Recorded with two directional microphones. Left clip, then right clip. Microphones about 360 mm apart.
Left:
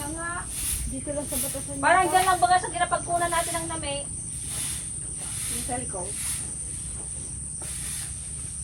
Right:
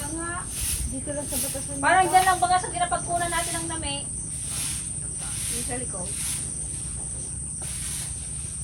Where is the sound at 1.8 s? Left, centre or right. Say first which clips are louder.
Right 1 dB; centre.